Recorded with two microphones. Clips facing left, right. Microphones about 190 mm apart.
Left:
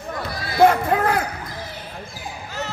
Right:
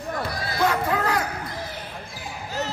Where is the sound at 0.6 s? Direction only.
55° left (ahead or behind).